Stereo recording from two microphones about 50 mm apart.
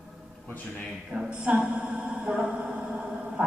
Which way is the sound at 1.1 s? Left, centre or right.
Right.